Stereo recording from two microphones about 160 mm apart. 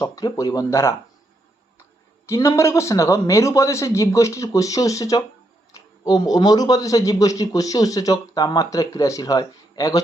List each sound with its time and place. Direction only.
0.0 s speech: 20° left (ahead or behind)
2.2 s speech: 20° left (ahead or behind)